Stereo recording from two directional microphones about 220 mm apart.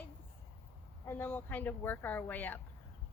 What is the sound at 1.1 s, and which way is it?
Speech, 10° left (ahead or behind).